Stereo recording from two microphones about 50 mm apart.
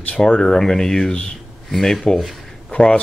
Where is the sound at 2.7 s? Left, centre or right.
Centre.